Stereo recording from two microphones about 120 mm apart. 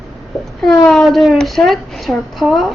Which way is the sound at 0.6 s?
5° left (ahead or behind).